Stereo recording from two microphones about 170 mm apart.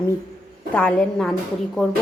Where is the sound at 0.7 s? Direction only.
5° left (ahead or behind).